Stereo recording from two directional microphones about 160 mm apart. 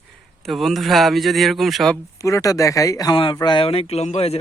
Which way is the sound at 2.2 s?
20° left (ahead or behind).